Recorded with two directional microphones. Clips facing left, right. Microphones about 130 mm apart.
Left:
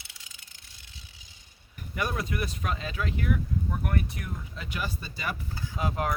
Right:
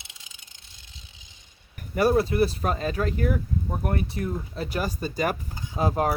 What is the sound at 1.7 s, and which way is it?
Speech, 40° right (ahead or behind).